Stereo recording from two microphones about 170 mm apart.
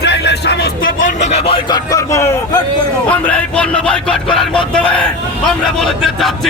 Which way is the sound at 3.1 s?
5° left (ahead or behind).